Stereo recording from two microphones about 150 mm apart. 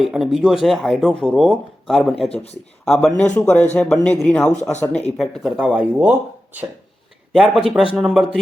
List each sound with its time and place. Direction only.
0.0 s speech: 5° right (ahead or behind)
2.3 s speech: 45° left (ahead or behind)
2.8 s speech: 5° left (ahead or behind)